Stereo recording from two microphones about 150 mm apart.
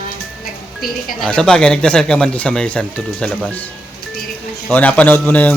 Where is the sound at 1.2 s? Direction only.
5° left (ahead or behind).